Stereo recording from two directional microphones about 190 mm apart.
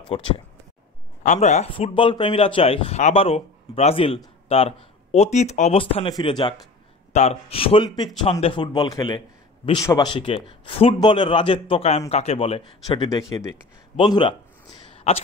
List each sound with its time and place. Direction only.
1.2 s a man's voice: 40° left (ahead or behind); by 6.5 s 25° left (ahead or behind)
7.1 s a man's voice: 35° left (ahead or behind)
14.9 s a sound: 30° left (ahead or behind)